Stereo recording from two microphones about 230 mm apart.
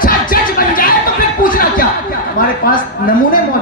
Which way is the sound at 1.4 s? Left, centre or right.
Left.